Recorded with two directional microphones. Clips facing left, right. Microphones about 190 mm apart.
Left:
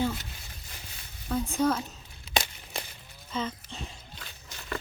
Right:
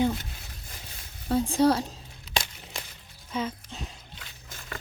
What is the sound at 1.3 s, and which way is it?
Speech, 30° right (ahead or behind).